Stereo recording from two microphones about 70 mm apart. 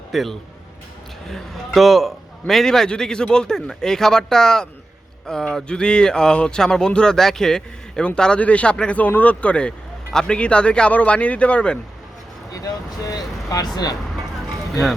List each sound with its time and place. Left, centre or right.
0.1 s a man's voice: centre
12.5 s speech: left
14.7 s speech: centre